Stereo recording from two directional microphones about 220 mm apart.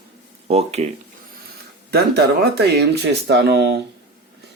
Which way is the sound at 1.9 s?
45° right (ahead or behind).